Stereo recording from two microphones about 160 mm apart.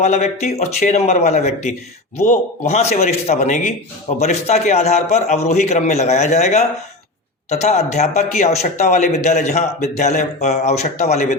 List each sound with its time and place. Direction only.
0.0 s speech: 45° left (ahead or behind)